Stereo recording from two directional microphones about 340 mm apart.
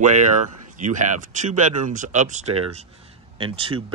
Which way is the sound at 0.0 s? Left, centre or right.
Right.